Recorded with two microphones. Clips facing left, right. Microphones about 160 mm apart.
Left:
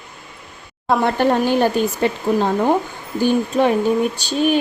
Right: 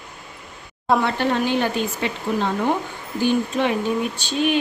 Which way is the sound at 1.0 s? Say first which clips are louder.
Left 5 dB; 45° left (ahead or behind).